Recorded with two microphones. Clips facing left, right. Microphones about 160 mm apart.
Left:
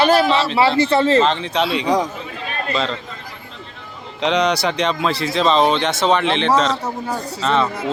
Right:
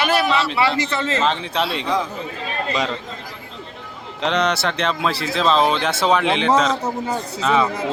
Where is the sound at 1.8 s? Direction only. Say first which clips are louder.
Left 4 dB; 40° left (ahead or behind).